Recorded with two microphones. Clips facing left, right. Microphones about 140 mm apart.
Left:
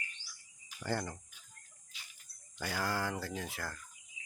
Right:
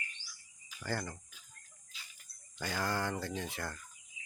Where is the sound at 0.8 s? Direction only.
15° left (ahead or behind).